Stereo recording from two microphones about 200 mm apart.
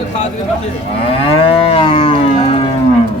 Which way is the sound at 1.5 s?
30° left (ahead or behind).